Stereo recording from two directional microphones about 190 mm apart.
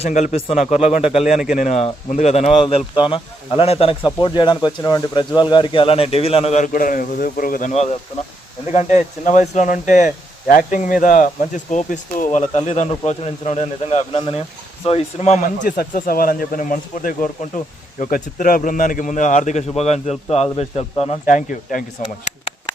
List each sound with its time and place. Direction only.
0.0 s speech: 40° left (ahead or behind)